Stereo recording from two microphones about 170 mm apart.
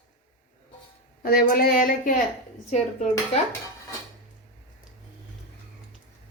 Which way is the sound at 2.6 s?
40° left (ahead or behind).